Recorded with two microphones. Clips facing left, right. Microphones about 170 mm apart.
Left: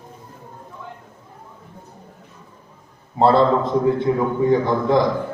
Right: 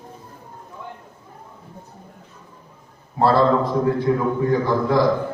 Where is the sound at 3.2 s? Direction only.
20° left (ahead or behind).